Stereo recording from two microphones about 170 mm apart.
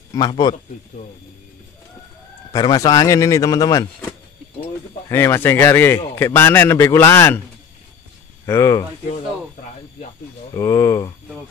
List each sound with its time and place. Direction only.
0.1 s speech: 25° left (ahead or behind)
2.5 s speech: 25° left (ahead or behind)
5.1 s a man's voice: 15° left (ahead or behind)
8.5 s a man's voice: 15° left (ahead or behind)
10.5 s a man's voice: 20° left (ahead or behind)